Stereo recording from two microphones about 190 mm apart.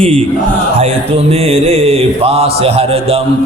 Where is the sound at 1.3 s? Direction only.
30° right (ahead or behind).